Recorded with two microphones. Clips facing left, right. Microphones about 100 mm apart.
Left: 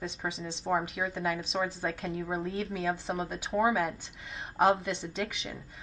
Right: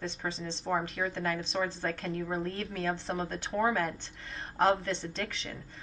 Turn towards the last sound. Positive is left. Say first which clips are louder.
# left 2 dB
turn(degrees=5)  # may be behind; listen again after turning